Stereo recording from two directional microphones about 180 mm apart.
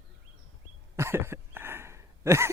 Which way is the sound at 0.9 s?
15° right (ahead or behind).